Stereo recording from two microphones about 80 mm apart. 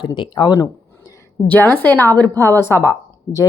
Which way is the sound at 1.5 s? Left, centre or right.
Left.